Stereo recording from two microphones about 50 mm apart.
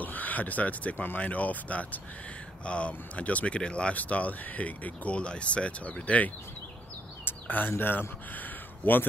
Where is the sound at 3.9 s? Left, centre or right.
Left.